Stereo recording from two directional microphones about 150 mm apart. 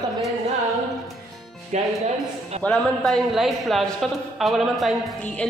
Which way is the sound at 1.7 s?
50° right (ahead or behind).